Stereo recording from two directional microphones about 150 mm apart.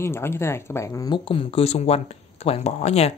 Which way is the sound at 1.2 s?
40° left (ahead or behind).